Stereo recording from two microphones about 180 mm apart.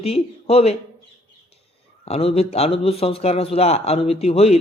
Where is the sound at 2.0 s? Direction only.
35° left (ahead or behind).